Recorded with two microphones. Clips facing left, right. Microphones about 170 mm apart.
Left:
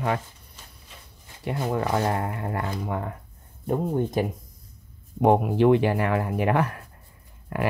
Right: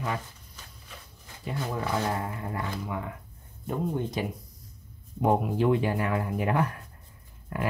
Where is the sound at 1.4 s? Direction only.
60° left (ahead or behind).